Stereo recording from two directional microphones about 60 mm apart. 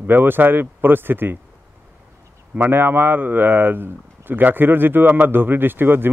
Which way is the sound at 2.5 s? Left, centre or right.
Right.